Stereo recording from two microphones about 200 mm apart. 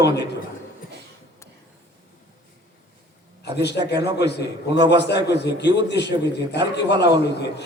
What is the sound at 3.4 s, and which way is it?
A man's voice, 55° left (ahead or behind).